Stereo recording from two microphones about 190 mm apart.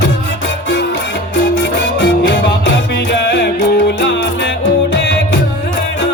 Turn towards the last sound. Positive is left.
turn(degrees=75)  # may be behind; listen again after turning